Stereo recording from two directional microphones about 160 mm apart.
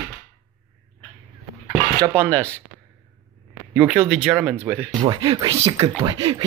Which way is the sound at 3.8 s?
15° right (ahead or behind).